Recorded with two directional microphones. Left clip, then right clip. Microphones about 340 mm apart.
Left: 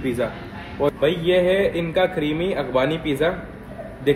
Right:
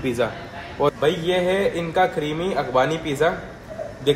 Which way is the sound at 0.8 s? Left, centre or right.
Right.